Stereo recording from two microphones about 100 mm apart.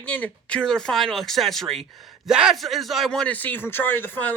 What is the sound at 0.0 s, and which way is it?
Speech, 10° left (ahead or behind).